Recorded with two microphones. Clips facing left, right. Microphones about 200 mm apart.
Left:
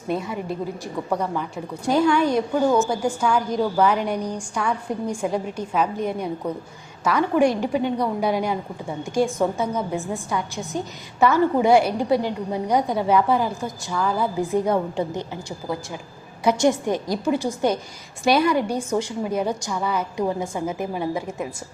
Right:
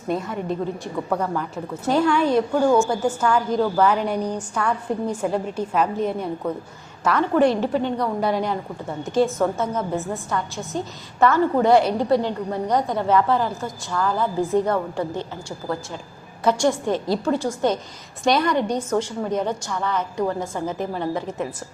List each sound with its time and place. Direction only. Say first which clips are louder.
0.1 s a woman's voice: right 1 dB; centre (ahead or behind)
10.5 s a woman's voice: left 1 dB; centre (ahead or behind)
11.2 s a woman's voice: even; 10° left (ahead or behind)